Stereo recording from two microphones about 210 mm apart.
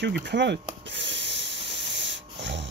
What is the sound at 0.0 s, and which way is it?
Speech, 55° right (ahead or behind).